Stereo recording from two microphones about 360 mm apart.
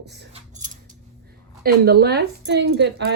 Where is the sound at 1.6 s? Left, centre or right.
Right.